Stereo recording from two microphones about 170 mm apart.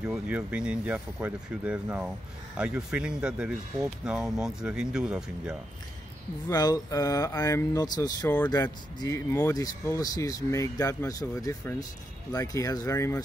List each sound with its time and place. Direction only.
0.1 s speech: 10° right (ahead or behind)
6.5 s speech: 20° left (ahead or behind)